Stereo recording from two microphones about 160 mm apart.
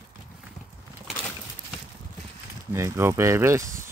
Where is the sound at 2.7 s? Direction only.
20° right (ahead or behind).